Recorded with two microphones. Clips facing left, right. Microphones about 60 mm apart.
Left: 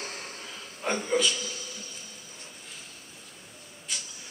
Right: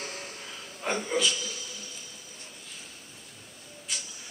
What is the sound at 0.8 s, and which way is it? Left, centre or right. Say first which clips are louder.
Speech: left 1 dB; centre.